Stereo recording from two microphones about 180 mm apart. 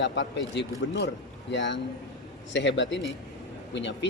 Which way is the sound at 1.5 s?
85° left.